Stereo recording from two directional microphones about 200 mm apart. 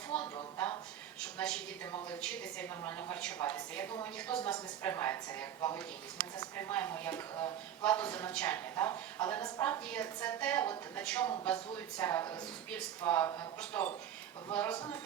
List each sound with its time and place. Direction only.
0.1 s a sound: 5° left (ahead or behind)
1.2 s a woman's voice: 5° left (ahead or behind)
7.3 s speech: 20° left (ahead or behind)
7.9 s a woman's voice: 5° left (ahead or behind)